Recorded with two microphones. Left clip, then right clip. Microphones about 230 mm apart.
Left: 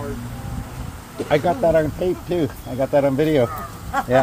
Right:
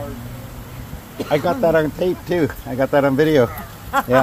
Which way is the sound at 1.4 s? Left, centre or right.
Right.